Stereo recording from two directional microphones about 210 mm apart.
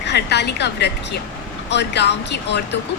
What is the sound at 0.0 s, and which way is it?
A woman's voice, 55° left (ahead or behind).